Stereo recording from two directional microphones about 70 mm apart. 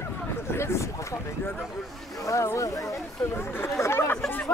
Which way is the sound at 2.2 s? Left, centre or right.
Left.